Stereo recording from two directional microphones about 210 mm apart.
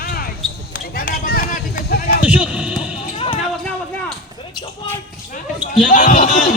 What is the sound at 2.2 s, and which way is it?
Music, 5° right (ahead or behind).